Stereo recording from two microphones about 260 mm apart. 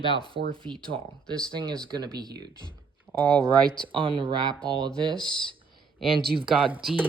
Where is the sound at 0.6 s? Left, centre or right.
Centre.